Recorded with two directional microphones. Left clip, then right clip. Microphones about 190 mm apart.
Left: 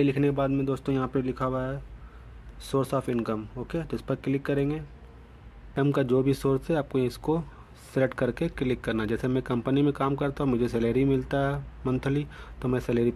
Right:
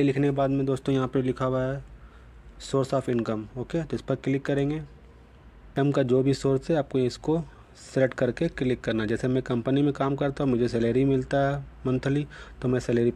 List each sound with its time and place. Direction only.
0.0 s speech: 25° right (ahead or behind)
0.9 s speech: 40° right (ahead or behind)
2.6 s speech: 20° right (ahead or behind)